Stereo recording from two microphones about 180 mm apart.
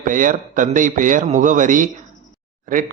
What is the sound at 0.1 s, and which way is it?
Speech, 45° right (ahead or behind).